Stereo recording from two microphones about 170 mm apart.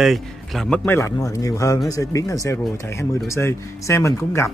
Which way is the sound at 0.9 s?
15° left (ahead or behind).